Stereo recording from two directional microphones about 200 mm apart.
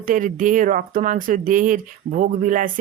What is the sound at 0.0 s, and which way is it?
Speech, 40° right (ahead or behind).